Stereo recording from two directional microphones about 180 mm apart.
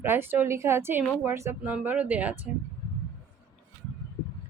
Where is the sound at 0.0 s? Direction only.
10° right (ahead or behind).